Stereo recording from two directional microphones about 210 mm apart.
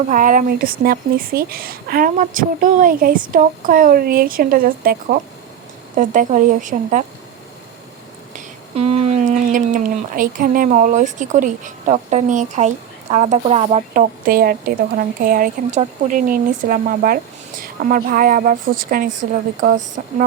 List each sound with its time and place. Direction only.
0.1 s a woman's voice: 40° right (ahead or behind)
6.0 s speech: 40° right (ahead or behind)
8.4 s a woman's voice: 30° right (ahead or behind)